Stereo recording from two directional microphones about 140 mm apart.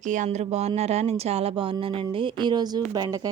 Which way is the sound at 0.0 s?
60° right (ahead or behind).